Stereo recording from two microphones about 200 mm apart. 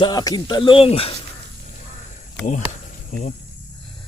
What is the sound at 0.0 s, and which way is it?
Speech, 20° left (ahead or behind).